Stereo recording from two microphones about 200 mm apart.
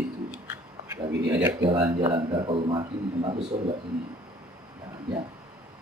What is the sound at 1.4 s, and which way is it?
A man's voice, 15° right (ahead or behind).